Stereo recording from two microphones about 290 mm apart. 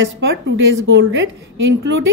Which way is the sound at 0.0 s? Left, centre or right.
Right.